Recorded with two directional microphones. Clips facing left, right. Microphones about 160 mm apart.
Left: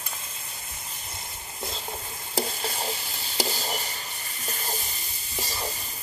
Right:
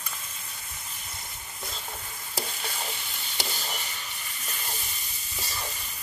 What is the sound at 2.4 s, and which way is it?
Stir, 35° left (ahead or behind).